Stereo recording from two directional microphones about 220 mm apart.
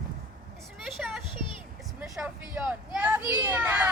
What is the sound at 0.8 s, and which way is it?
Children playing, centre (ahead or behind).